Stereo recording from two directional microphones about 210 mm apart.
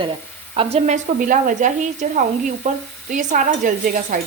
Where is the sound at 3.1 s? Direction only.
35° right (ahead or behind).